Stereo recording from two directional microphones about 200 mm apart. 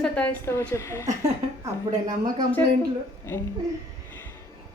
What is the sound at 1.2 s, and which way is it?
A woman's voice, 15° right (ahead or behind).